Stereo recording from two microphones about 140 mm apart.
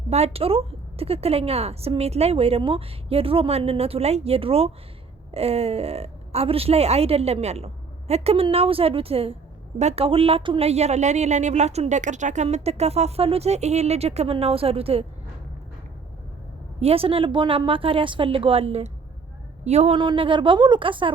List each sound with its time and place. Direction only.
0.1 s a woman's voice: 45° right (ahead or behind)
16.8 s a woman's voice: 45° right (ahead or behind)
20.0 s a woman's voice: 35° right (ahead or behind)